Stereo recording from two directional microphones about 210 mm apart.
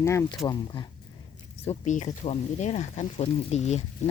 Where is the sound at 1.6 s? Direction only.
35° left (ahead or behind).